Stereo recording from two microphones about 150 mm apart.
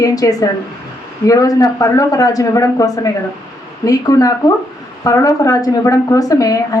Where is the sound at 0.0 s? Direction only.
25° left (ahead or behind).